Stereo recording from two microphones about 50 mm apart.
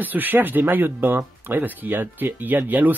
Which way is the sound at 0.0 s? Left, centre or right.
Right.